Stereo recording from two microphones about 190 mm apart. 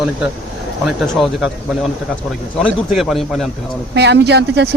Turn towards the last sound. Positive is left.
turn(degrees=-60)  # may be behind; listen again after turning